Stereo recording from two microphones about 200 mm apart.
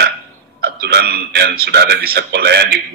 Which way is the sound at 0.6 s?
50° right (ahead or behind).